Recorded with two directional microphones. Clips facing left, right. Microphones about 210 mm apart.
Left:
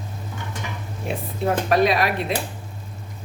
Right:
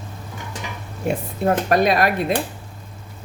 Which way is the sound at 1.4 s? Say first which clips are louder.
Right 1 dB; 50° right (ahead or behind).